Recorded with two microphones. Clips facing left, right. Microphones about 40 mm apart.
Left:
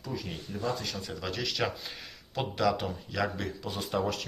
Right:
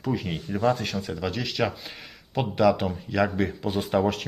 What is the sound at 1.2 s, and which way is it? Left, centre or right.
Speech, centre.